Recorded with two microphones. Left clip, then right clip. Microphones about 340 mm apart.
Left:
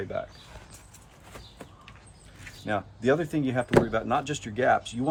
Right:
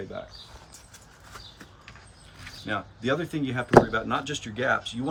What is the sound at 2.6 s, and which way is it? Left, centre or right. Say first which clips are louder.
Speech: left 2 dB; left.